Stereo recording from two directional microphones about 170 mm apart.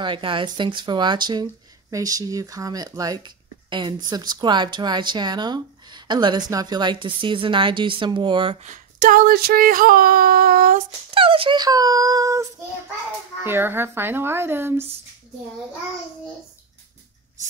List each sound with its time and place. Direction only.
0.0 s speech: 30° right (ahead or behind)
8.6 s speech: 50° right (ahead or behind)
11.1 s speech: 30° right (ahead or behind); by 14.9 s 15° right (ahead or behind)